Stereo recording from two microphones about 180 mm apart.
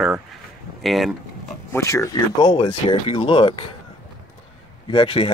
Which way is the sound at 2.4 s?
25° left (ahead or behind).